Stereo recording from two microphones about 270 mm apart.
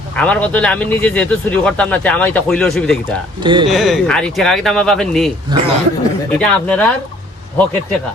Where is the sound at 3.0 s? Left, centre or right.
Centre.